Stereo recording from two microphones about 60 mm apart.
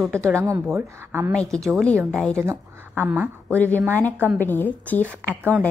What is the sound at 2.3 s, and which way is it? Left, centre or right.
Speech, right.